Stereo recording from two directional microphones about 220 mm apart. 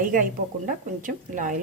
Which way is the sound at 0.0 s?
40° right (ahead or behind).